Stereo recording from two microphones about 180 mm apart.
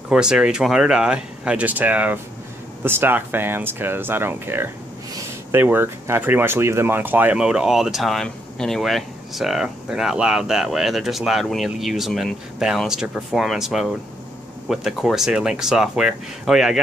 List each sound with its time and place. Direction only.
0.1 s speech: 5° right (ahead or behind)